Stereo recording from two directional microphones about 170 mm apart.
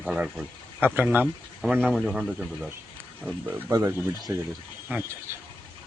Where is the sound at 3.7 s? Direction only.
20° right (ahead or behind).